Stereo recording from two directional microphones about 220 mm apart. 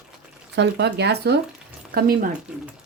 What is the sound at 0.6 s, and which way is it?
Speech, 50° right (ahead or behind).